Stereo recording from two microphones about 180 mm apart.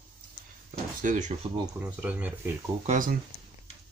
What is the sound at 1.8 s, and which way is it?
Speech, 10° right (ahead or behind).